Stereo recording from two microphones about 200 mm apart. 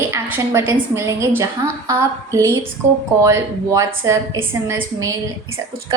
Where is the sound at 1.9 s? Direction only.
15° right (ahead or behind).